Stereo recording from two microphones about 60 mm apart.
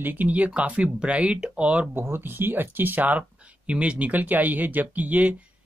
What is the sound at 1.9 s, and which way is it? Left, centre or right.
Speech, right.